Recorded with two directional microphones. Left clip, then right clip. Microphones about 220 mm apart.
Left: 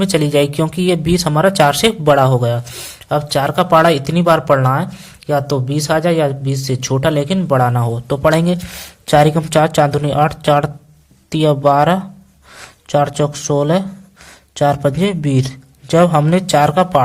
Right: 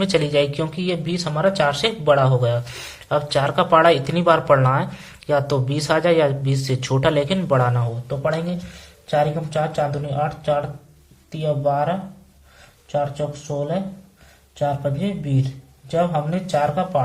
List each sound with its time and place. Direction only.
0.0 s speech: 35° left (ahead or behind)
8.0 s a man's voice: 45° left (ahead or behind)